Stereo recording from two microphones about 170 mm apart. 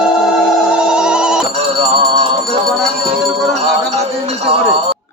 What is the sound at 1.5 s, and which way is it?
Music, 35° right (ahead or behind).